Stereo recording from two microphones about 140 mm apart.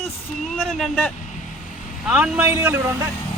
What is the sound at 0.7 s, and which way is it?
A man's voice, centre (ahead or behind).